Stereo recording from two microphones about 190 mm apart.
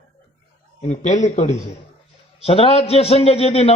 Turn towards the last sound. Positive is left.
turn(degrees=30)  # may be behind; listen again after turning